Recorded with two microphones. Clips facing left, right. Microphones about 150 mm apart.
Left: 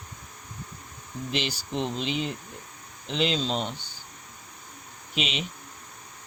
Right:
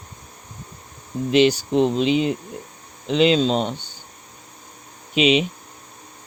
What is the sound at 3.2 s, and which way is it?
Speech, 65° right (ahead or behind).